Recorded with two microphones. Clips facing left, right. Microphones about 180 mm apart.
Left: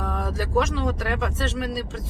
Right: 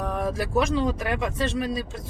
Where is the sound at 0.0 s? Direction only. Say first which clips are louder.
Right 2 dB; 15° right (ahead or behind).